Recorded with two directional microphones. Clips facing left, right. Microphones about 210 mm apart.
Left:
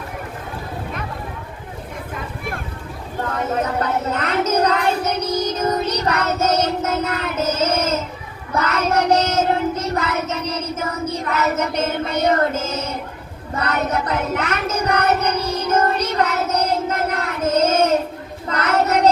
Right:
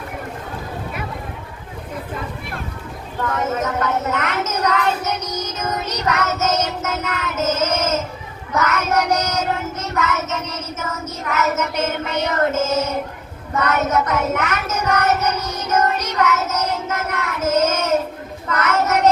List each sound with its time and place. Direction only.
3.3 s child singing: 35° left (ahead or behind)
12.0 s music: 35° left (ahead or behind)
13.5 s child singing: 35° left (ahead or behind)